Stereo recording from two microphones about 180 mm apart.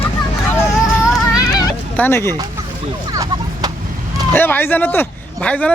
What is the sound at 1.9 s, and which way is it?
Speech, 10° left (ahead or behind).